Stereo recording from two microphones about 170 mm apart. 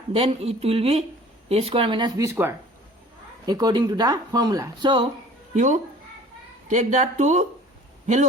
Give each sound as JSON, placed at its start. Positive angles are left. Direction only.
{"t": 0.1, "sound": "speech", "side_deg": -35}
{"t": 2.3, "sound": "speech", "side_deg": -10}
{"t": 3.4, "sound": "speech", "side_deg": -25}
{"t": 5.5, "sound": "speech", "side_deg": -45}